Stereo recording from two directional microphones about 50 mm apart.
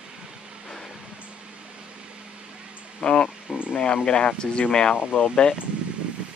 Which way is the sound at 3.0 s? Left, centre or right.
Centre.